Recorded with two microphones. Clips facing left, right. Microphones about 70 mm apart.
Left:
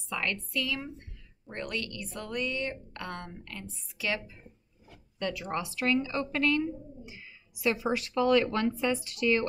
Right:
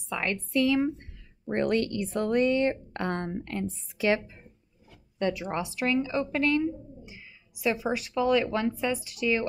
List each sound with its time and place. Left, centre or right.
0.1 s speech: right
5.2 s speech: right